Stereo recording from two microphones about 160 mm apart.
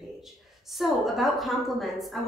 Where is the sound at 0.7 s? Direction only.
Centre (ahead or behind).